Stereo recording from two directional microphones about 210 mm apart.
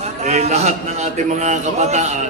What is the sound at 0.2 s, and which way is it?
A man's voice, 30° right (ahead or behind).